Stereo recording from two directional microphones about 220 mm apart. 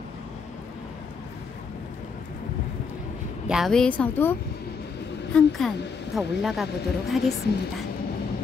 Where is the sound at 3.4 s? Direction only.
Centre (ahead or behind).